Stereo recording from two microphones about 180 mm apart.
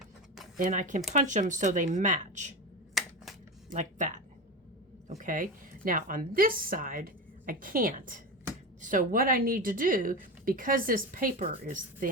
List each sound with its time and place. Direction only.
0.5 s speech: 45° right (ahead or behind)
3.7 s speech: 45° right (ahead or behind)